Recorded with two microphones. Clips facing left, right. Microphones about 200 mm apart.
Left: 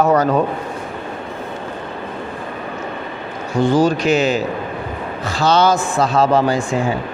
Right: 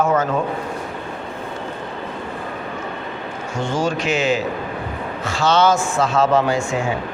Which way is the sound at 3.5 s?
35° left (ahead or behind).